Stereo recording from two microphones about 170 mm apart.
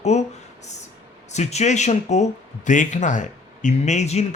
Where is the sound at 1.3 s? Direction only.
40° left (ahead or behind).